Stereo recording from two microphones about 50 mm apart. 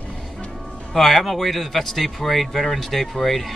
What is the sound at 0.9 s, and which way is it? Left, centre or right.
A man's voice, centre.